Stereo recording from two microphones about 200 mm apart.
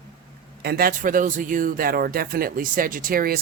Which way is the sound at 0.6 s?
50° right (ahead or behind).